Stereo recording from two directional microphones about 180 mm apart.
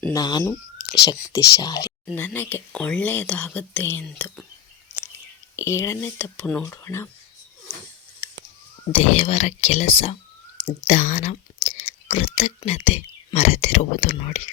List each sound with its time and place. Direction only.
0.1 s speech: 20° left (ahead or behind)
0.8 s a sound: 65° left (ahead or behind)
1.0 s speech: 20° left (ahead or behind)
2.0 s speech: 10° left (ahead or behind)
4.9 s whispering: 10° right (ahead or behind)
5.5 s speech: 15° left (ahead or behind)
8.9 s speech: 35° left (ahead or behind)